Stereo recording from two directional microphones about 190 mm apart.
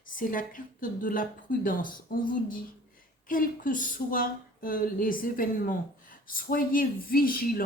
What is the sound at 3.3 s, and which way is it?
Speech, 45° left (ahead or behind).